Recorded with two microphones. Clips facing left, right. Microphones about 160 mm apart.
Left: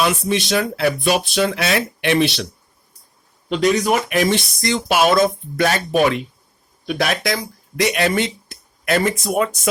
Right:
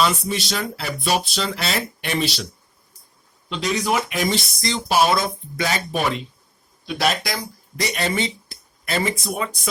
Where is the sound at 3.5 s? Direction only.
50° left (ahead or behind); by 5.1 s 85° left.